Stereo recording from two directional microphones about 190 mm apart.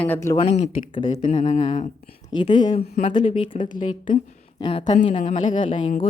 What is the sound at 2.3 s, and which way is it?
Speech, 25° left (ahead or behind).